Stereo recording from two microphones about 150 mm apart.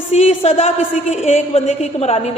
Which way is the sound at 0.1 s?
45° left (ahead or behind).